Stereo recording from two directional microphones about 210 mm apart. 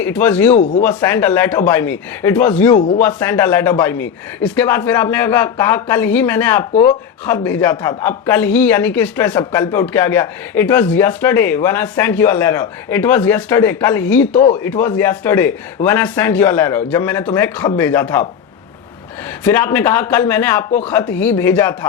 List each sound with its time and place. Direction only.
0.0 s speech: 10° left (ahead or behind)
0.5 s speech: 35° left (ahead or behind)
0.9 s speech: 10° left (ahead or behind)
2.7 s speech: 40° left (ahead or behind)
3.0 s speech: 10° left (ahead or behind)
14.3 s speech: 35° left (ahead or behind)
14.6 s speech: 10° left (ahead or behind)
19.5 s speech: 10° left (ahead or behind)